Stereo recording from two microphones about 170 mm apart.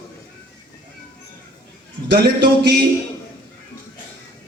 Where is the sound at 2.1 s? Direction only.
65° right (ahead or behind).